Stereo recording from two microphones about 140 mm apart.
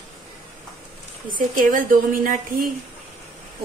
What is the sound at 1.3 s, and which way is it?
A woman's voice, 75° right (ahead or behind).